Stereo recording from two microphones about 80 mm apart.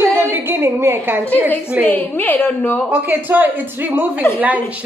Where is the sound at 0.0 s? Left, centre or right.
Right.